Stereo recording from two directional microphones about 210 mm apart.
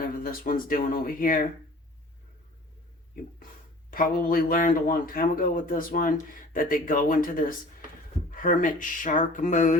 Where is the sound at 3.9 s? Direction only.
40° left (ahead or behind).